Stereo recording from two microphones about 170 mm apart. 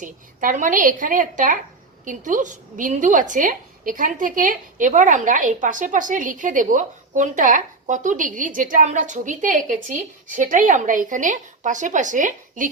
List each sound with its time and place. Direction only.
0.0 s a woman's voice: 50° right (ahead or behind)